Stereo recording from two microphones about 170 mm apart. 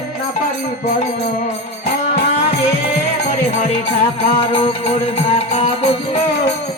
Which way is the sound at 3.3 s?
40° left (ahead or behind).